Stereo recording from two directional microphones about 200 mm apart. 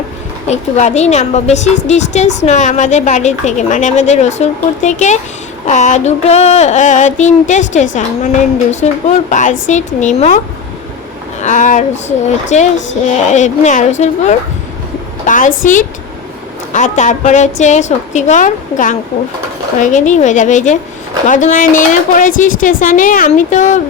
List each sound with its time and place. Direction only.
0.5 s a woman's voice: 35° left (ahead or behind)